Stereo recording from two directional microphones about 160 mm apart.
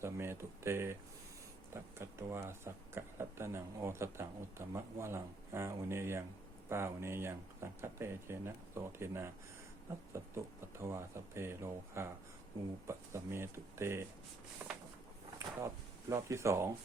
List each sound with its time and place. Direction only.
0.0 s speech: 15° right (ahead or behind)
14.6 s a sound: 10° right (ahead or behind)
15.4 s speech: 20° right (ahead or behind)